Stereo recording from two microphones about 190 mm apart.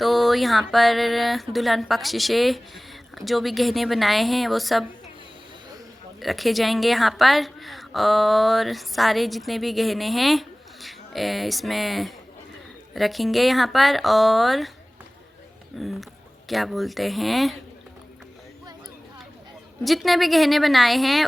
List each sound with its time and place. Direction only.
0.0 s a woman's voice: centre (ahead or behind)
6.1 s a woman's voice: centre (ahead or behind)
15.8 s a woman's voice: centre (ahead or behind)
19.8 s a woman's voice: centre (ahead or behind)